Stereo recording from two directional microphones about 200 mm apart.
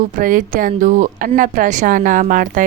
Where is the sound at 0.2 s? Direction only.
40° right (ahead or behind).